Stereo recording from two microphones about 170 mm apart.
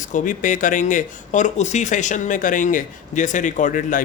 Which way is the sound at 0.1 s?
50° left (ahead or behind).